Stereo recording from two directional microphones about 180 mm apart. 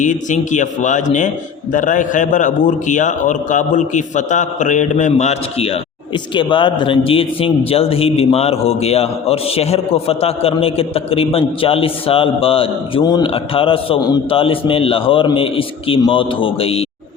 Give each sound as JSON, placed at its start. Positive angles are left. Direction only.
{"t": 0.0, "sound": "a man's voice", "side_deg": 45}